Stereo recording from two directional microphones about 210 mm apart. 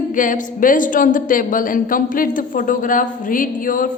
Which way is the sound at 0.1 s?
40° left (ahead or behind).